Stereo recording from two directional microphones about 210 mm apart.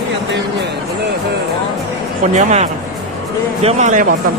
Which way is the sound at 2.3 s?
30° right (ahead or behind).